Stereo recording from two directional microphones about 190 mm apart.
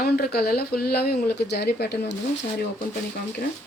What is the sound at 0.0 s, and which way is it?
Speech, 55° left (ahead or behind).